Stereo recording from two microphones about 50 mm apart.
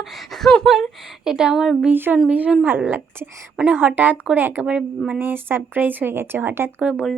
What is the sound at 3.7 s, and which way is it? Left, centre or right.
A woman's voice, right.